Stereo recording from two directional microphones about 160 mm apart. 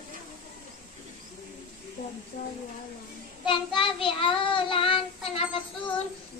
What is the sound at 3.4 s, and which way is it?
Child singing, 30° left (ahead or behind).